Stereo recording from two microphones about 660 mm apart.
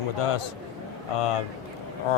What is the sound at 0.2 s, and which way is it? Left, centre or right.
Speech, left.